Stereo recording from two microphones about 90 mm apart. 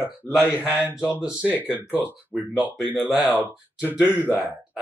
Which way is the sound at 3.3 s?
20° right (ahead or behind).